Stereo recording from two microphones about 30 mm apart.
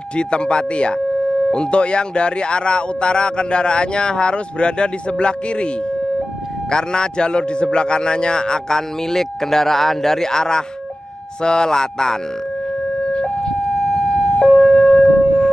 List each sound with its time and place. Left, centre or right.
0.1 s speech: left
6.7 s a man's voice: left
13.2 s ambulance: left
13.7 s siren: centre
14.5 s wind instrument: centre